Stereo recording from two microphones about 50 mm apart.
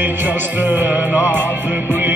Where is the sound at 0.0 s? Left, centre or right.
Right.